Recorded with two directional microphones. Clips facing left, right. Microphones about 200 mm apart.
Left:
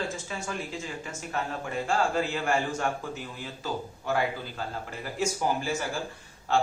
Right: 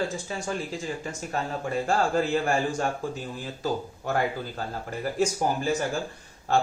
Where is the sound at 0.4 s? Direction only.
35° right (ahead or behind).